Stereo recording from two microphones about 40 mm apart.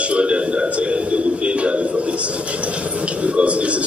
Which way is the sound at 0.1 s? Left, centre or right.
Right.